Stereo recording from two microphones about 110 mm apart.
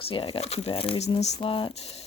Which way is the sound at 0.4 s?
65° left (ahead or behind).